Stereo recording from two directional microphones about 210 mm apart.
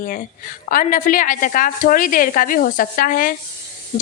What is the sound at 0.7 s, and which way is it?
A woman's voice, 40° left (ahead or behind).